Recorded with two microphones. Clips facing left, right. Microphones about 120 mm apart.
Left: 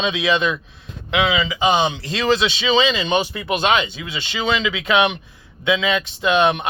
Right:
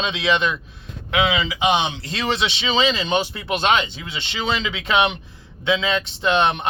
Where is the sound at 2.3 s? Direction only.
25° right (ahead or behind).